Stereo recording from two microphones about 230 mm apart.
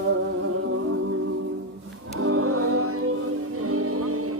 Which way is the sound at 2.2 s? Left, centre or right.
Right.